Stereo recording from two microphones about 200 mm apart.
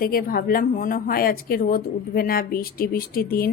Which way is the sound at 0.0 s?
45° left (ahead or behind).